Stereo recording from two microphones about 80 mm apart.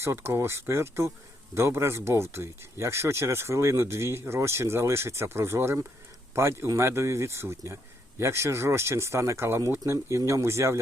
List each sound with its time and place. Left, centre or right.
0.0 s speech: right